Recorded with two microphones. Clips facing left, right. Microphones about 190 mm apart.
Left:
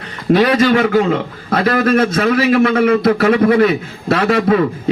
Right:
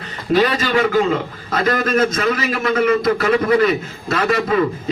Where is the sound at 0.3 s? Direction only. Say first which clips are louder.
Left 4 dB; 50° left (ahead or behind).